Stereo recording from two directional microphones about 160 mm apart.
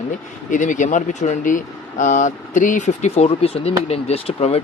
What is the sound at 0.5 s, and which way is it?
Speech, 50° left (ahead or behind).